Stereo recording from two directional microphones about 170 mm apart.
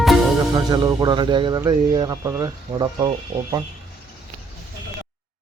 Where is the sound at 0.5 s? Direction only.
25° right (ahead or behind).